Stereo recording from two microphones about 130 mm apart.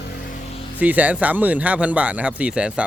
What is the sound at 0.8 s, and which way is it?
Speech, 10° right (ahead or behind).